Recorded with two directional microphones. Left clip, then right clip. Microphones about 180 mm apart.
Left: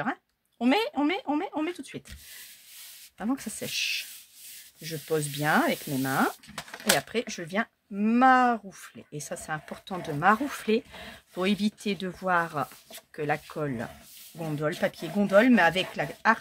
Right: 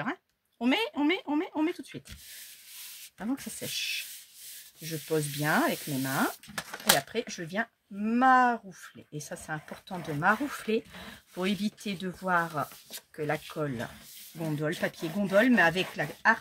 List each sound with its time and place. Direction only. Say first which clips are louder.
0.0 s speech: left 3 dB; 40° left (ahead or behind)
3.2 s speech: left 4 dB; 40° left (ahead or behind)